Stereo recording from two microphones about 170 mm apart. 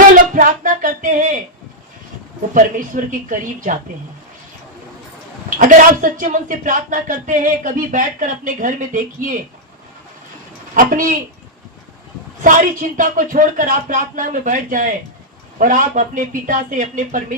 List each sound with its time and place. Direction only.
0.1 s a sound: 55° right (ahead or behind)
2.6 s speech: 50° right (ahead or behind)
5.5 s speech: 50° right (ahead or behind)
10.8 s speech: 50° right (ahead or behind)
12.4 s speech: 55° right (ahead or behind)